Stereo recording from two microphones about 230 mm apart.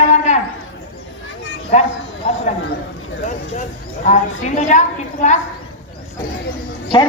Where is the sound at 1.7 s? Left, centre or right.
Left.